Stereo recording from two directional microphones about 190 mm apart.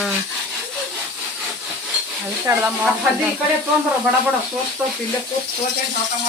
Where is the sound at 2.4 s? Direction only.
10° right (ahead or behind).